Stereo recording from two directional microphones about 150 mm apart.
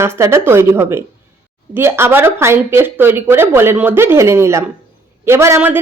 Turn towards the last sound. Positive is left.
turn(degrees=-15)  # may be behind; listen again after turning